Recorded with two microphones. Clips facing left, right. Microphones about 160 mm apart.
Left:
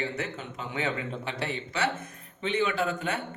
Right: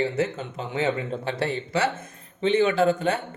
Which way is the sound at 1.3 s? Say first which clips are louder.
Right 10 dB; 30° right (ahead or behind).